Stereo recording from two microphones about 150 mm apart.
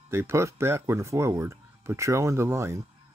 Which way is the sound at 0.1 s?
15° right (ahead or behind).